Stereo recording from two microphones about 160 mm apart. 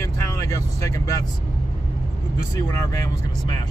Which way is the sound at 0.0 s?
20° left (ahead or behind).